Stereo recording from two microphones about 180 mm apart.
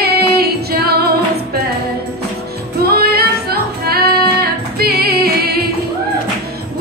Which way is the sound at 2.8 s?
60° right (ahead or behind).